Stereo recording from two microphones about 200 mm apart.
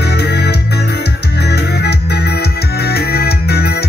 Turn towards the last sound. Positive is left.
turn(degrees=55)  # may be behind; listen again after turning